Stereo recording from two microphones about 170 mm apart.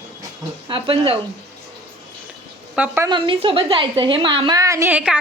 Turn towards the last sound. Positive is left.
turn(degrees=-5)  # may be behind; listen again after turning